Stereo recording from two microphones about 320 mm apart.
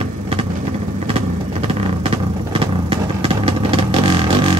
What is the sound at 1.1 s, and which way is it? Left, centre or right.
Vehicle, centre.